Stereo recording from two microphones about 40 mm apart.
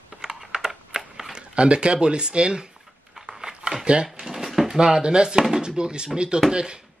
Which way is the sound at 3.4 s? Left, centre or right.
Centre.